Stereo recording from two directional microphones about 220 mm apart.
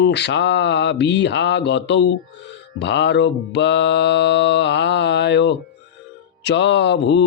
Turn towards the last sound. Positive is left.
turn(degrees=50)  # may be behind; listen again after turning